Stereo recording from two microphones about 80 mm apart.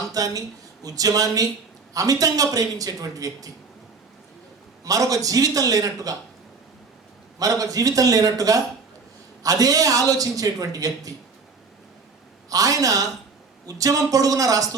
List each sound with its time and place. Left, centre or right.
0.1 s a man's voice: right
4.9 s a man's voice: right
7.3 s a man's voice: right
12.5 s a man's voice: right